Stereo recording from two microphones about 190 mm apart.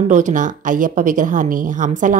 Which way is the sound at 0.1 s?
40° right (ahead or behind).